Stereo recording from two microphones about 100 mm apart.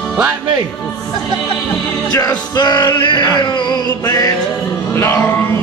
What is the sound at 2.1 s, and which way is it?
Music, 40° left (ahead or behind).